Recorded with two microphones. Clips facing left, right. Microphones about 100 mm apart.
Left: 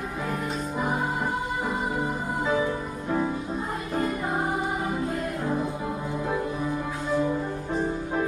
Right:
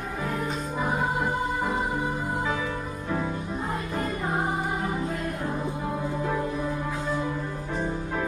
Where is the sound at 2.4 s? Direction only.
20° left (ahead or behind).